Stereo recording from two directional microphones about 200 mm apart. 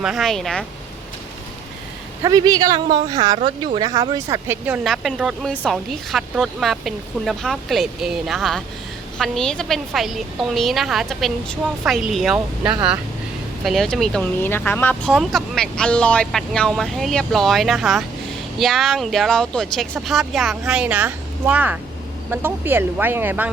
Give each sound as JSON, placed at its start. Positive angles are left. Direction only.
{"t": 0.0, "sound": "speech", "side_deg": 0}
{"t": 2.2, "sound": "speech", "side_deg": -20}